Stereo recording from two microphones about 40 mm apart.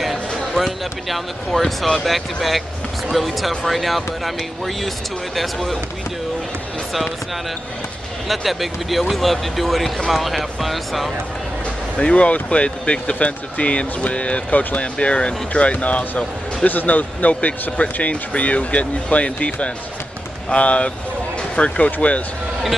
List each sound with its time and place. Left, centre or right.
0.6 s speech: centre
8.3 s speech: centre
12.0 s speech: left
16.6 s speech: left